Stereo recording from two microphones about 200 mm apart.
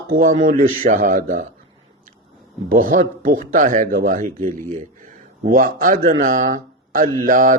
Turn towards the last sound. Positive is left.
turn(degrees=-40)  # may be behind; listen again after turning